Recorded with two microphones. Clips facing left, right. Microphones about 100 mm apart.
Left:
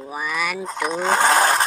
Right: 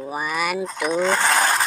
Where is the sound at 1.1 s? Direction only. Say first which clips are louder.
Left 3 dB; 20° left (ahead or behind).